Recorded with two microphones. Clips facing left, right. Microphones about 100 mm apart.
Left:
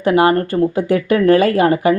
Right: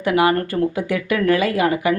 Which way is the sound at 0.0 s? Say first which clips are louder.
Left 4 dB; 35° left (ahead or behind).